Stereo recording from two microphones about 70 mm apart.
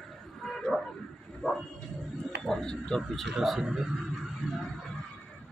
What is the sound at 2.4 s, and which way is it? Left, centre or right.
Speech, centre.